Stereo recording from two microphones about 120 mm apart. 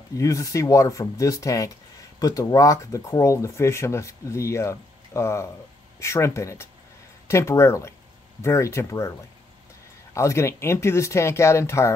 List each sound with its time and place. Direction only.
0.2 s speech: 25° left (ahead or behind)
10.1 s speech: 25° left (ahead or behind)